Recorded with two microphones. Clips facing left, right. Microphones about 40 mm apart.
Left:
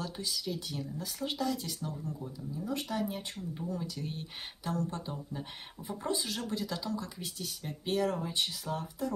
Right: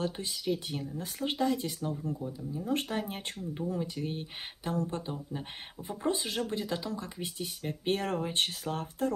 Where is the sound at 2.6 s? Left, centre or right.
Right.